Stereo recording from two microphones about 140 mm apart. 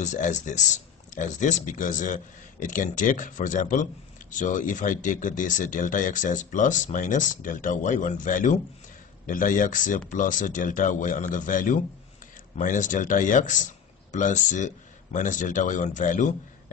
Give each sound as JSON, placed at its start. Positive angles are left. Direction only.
{"t": 0.0, "sound": "speech", "side_deg": 60}